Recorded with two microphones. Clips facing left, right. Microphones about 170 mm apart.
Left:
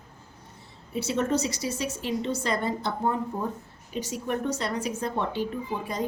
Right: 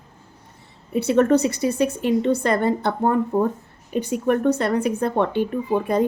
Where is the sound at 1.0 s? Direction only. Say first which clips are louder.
Right 9 dB; 60° right (ahead or behind).